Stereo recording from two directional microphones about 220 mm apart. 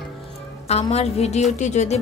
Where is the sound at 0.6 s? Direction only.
30° left (ahead or behind).